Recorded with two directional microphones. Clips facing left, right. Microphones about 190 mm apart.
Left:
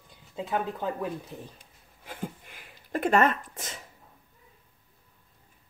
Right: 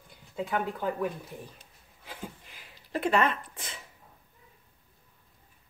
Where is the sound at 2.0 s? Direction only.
50° left (ahead or behind).